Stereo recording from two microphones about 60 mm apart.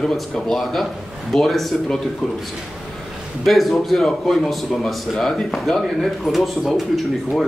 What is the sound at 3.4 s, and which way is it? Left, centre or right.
A man's voice, centre.